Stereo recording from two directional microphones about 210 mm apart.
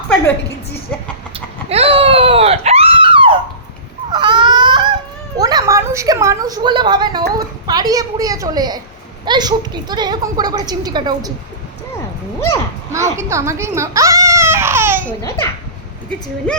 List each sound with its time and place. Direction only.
1.7 s a sound: 25° right (ahead or behind)
4.1 s honk: 20° right (ahead or behind)
5.4 s a sound: 20° right (ahead or behind)
9.2 s a woman's voice: 20° right (ahead or behind)
12.9 s baby cry: 15° right (ahead or behind)
15.2 s a child's voice: 15° left (ahead or behind)